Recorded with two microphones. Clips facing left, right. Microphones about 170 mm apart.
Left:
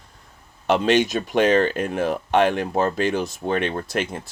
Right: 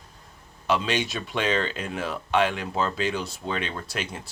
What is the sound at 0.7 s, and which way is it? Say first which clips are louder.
Speech: left 7 dB; 50° left (ahead or behind).